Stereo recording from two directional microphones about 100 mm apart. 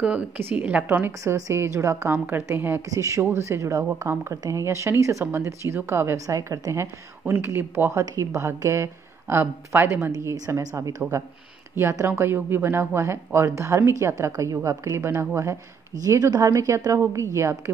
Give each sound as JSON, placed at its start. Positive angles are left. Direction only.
{"t": 0.0, "sound": "a woman's voice", "side_deg": -10}
{"t": 2.1, "sound": "a woman's voice", "side_deg": -20}
{"t": 10.1, "sound": "a woman's voice", "side_deg": -35}